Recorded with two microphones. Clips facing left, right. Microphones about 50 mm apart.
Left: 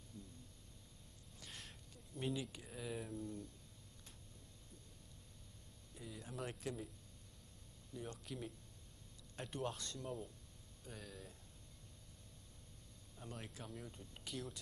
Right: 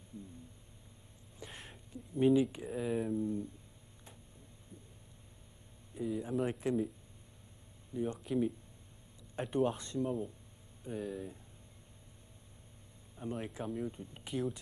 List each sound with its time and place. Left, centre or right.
1.4 s speech: right
5.9 s speech: centre
7.9 s speech: right
13.1 s speech: right